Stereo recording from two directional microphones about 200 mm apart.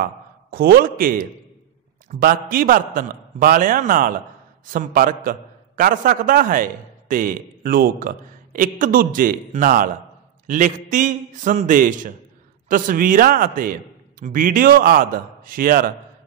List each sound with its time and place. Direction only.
0.0 s a man's voice: 50° right (ahead or behind)